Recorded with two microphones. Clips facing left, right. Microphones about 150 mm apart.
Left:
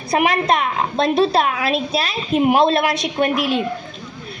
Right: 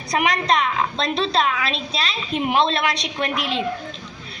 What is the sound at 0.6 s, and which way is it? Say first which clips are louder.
Speech: left 4 dB; 45° left (ahead or behind).